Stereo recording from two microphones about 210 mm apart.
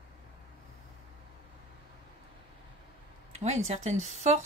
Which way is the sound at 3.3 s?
30° right (ahead or behind).